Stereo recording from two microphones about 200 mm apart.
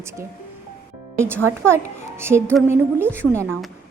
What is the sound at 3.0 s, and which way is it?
Speech, 10° right (ahead or behind).